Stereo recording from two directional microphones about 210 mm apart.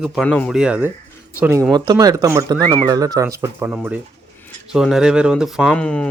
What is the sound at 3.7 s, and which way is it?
Speech, centre (ahead or behind).